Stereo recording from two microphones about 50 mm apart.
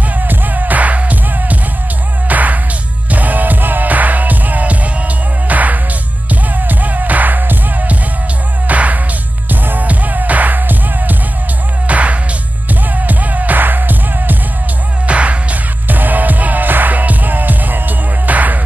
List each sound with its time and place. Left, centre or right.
0.3 s music: right
15.0 s music: right
15.9 s music: right